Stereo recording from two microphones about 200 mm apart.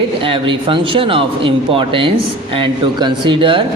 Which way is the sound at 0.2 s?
25° right (ahead or behind).